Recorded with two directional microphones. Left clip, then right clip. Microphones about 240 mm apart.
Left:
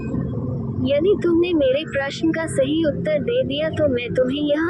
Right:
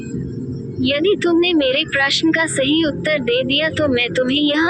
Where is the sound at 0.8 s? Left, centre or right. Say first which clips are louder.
Right 2 dB; right.